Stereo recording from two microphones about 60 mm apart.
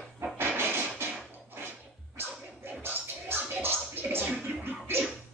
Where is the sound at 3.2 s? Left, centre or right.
Right.